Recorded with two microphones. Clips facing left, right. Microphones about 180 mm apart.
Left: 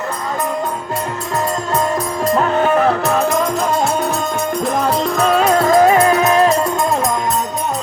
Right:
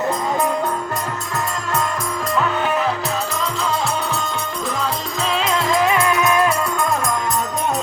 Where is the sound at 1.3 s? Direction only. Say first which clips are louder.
Left 6 dB; 30° left (ahead or behind).